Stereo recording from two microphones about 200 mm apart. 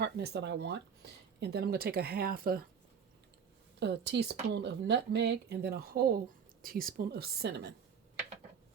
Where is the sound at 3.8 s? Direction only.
60° right (ahead or behind).